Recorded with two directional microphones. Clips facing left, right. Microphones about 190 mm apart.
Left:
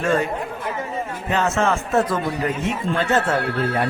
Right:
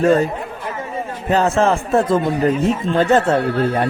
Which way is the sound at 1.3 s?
35° right (ahead or behind).